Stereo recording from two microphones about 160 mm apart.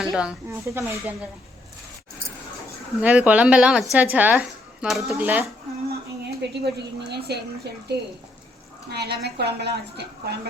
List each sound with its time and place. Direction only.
0.0 s speech: 5° right (ahead or behind)
0.6 s speech: 15° right (ahead or behind)
3.0 s speech: 10° right (ahead or behind)
6.5 s a woman's voice: 90° right